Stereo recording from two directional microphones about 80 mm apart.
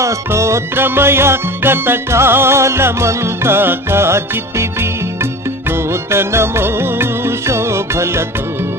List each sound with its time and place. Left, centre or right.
0.0 s music: right